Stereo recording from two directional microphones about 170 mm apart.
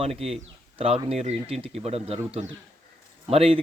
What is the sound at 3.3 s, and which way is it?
Speech, 35° right (ahead or behind).